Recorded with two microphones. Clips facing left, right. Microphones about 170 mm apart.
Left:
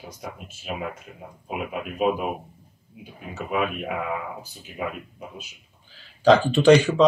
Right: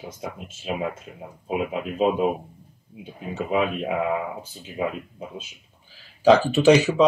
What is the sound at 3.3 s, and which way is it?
Speech, 25° right (ahead or behind).